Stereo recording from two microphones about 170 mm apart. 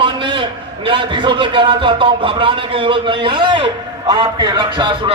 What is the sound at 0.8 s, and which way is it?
A man's voice, 30° right (ahead or behind).